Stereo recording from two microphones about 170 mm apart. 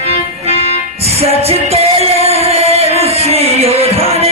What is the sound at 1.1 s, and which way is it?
Music, 35° right (ahead or behind).